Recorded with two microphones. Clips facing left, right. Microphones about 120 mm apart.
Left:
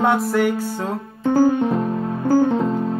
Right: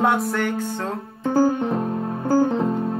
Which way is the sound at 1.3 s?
45° right (ahead or behind).